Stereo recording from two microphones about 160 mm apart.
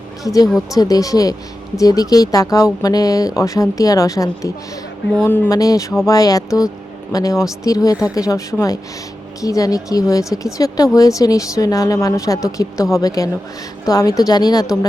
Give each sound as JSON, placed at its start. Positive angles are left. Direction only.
{"t": 0.7, "sound": "speech", "side_deg": 20}